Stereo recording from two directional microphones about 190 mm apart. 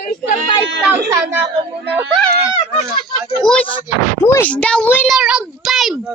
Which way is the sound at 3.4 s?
5° left (ahead or behind).